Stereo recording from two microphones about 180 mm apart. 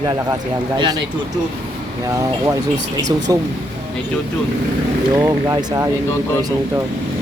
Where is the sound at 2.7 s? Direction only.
80° right.